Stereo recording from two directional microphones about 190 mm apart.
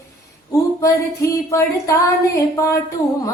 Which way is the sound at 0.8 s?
15° left (ahead or behind).